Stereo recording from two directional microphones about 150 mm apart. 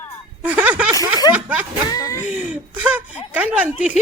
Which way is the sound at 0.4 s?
10° right (ahead or behind).